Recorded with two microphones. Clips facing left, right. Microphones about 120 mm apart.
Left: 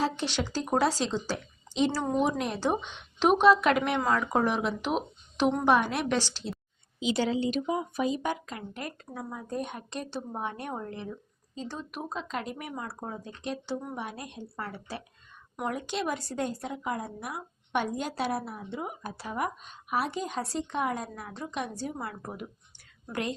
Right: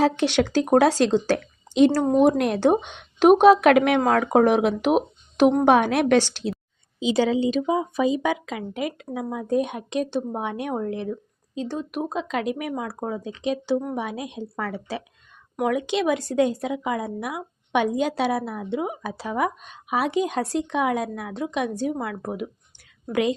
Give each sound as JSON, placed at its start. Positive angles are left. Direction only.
{"t": 0.0, "sound": "a woman's voice", "side_deg": -70}
{"t": 2.1, "sound": "a woman's voice", "side_deg": -50}
{"t": 7.6, "sound": "speech", "side_deg": -90}